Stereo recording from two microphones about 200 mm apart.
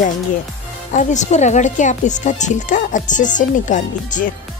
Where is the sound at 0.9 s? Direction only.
35° left (ahead or behind).